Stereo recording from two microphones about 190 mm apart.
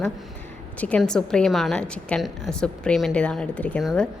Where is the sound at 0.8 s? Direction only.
5° left (ahead or behind).